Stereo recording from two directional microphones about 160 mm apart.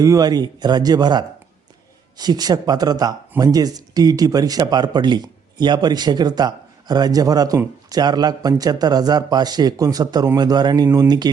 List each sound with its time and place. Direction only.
0.0 s speech: 20° right (ahead or behind)